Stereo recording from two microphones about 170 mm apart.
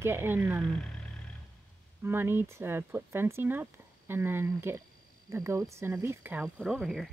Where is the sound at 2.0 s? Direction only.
15° right (ahead or behind).